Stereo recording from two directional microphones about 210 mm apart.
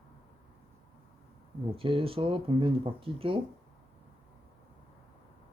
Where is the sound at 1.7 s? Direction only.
25° right (ahead or behind).